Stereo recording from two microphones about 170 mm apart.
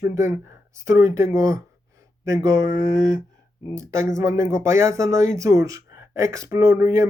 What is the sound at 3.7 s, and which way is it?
Speech, 15° right (ahead or behind).